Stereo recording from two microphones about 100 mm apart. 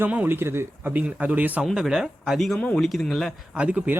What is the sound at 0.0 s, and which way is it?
Speech, 20° right (ahead or behind).